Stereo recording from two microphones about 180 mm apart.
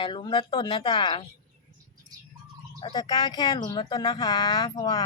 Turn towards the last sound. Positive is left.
turn(degrees=25)  # may be behind; listen again after turning